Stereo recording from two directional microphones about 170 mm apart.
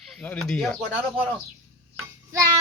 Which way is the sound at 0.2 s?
5° left (ahead or behind).